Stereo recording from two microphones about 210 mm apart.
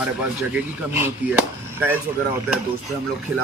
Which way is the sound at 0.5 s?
10° right (ahead or behind).